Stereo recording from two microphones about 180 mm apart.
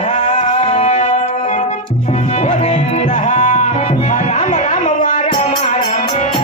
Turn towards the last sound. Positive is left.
turn(degrees=40)  # may be behind; listen again after turning